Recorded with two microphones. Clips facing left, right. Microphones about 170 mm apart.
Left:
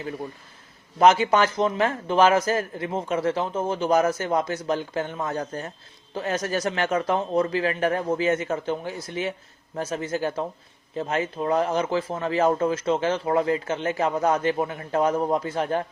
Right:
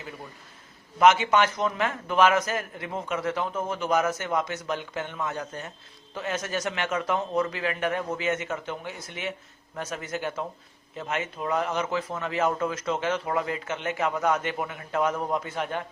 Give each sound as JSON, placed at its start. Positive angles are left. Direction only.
{"t": 0.9, "sound": "speech", "side_deg": 35}